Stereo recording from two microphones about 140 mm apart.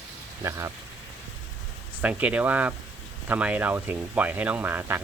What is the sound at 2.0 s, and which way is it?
Speech, 10° right (ahead or behind).